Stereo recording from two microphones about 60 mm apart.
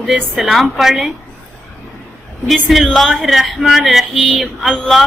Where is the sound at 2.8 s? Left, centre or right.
Centre.